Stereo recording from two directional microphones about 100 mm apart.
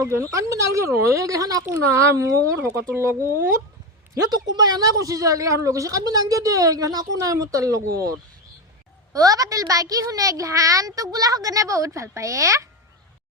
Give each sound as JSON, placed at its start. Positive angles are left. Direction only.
{"t": 0.0, "sound": "a woman's voice", "side_deg": -30}
{"t": 1.6, "sound": "speech", "side_deg": -25}
{"t": 4.3, "sound": "a woman's voice", "side_deg": -40}
{"t": 9.1, "sound": "a woman's voice", "side_deg": -35}